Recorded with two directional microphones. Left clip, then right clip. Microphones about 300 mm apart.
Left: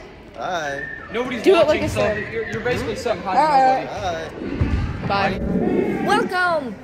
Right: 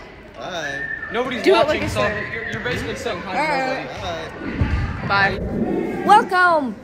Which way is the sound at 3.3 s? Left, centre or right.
Centre.